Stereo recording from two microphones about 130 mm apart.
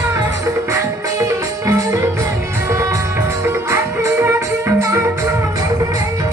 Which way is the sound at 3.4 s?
20° right (ahead or behind).